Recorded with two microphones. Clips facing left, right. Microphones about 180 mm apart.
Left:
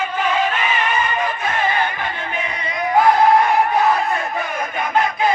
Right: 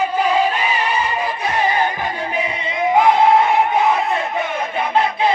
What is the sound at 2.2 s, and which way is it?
Crowd, 30° right (ahead or behind).